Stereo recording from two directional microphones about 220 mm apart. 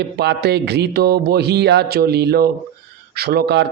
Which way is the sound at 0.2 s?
50° right (ahead or behind).